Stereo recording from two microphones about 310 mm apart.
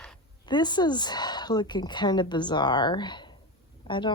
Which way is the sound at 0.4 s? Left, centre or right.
Centre.